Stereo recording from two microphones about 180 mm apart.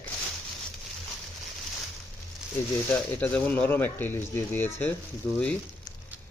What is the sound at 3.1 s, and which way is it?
Speech, 10° left (ahead or behind).